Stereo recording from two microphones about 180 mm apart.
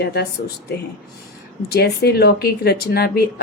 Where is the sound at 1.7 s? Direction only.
65° left (ahead or behind).